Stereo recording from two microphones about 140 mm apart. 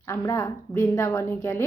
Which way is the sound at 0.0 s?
20° left (ahead or behind).